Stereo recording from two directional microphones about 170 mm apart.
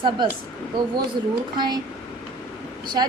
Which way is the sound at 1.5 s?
25° right (ahead or behind).